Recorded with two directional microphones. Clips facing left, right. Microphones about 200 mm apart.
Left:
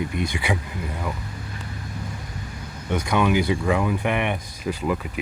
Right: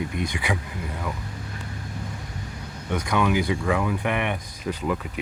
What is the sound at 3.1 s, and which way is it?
Speech, 25° left (ahead or behind).